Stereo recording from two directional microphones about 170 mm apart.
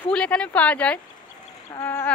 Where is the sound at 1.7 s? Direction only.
15° left (ahead or behind).